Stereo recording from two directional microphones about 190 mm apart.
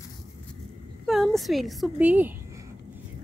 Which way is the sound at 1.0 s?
Centre (ahead or behind).